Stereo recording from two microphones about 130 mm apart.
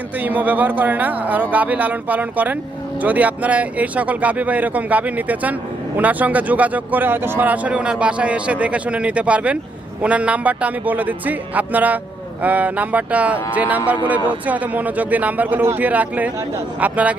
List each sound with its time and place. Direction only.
0.2 s speech: 15° right (ahead or behind)